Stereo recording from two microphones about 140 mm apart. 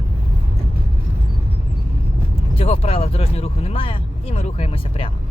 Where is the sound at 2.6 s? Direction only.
45° left (ahead or behind).